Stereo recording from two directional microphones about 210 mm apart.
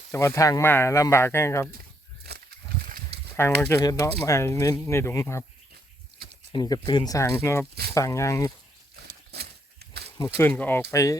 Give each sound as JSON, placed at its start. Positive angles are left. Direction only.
{"t": 0.1, "sound": "speech", "side_deg": 15}
{"t": 3.6, "sound": "speech", "side_deg": 15}
{"t": 6.5, "sound": "speech", "side_deg": 20}
{"t": 10.2, "sound": "speech", "side_deg": 10}